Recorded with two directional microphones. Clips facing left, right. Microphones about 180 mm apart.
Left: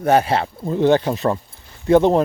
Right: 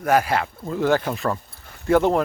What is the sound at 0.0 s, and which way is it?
Speech, 25° left (ahead or behind).